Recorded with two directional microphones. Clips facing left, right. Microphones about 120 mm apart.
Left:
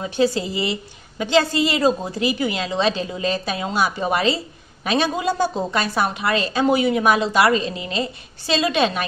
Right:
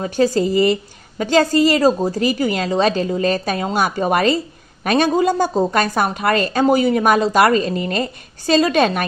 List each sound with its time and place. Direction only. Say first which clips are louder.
0.0 s a woman's voice: right 4 dB; 45° right (ahead or behind)